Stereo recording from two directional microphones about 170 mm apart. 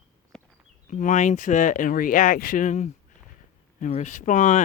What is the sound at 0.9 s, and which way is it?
Speech, 45° left (ahead or behind).